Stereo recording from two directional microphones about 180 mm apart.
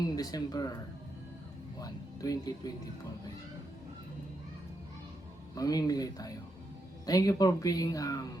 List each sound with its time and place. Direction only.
0.0 s speech: 20° left (ahead or behind)
1.8 s speech: 20° left (ahead or behind)
5.5 s speech: 20° left (ahead or behind)